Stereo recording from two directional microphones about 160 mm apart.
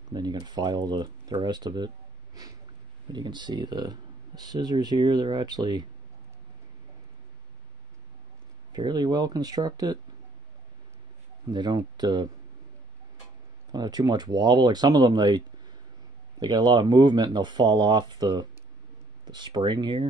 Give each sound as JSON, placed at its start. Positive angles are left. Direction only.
{"t": 0.1, "sound": "speech", "side_deg": -25}
{"t": 3.1, "sound": "speech", "side_deg": -25}
{"t": 8.7, "sound": "speech", "side_deg": -25}
{"t": 11.5, "sound": "speech", "side_deg": -25}
{"t": 13.7, "sound": "speech", "side_deg": -25}